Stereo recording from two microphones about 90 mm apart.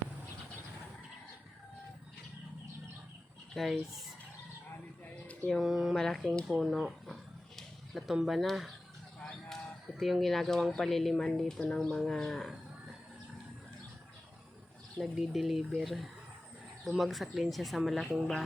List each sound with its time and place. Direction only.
3.5 s speech: centre (ahead or behind)
5.2 s speech: 15° left (ahead or behind)
5.5 s speech: 5° right (ahead or behind)
6.6 s a sound: centre (ahead or behind)
10.0 s speech: centre (ahead or behind)
14.9 s speech: 10° right (ahead or behind)